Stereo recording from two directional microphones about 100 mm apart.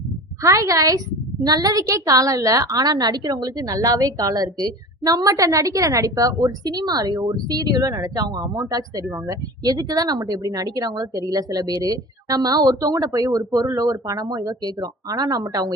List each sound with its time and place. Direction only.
0.4 s a woman's voice: 35° right (ahead or behind)